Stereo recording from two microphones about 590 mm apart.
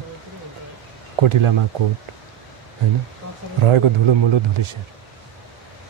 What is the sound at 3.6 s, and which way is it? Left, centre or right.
Speech, right.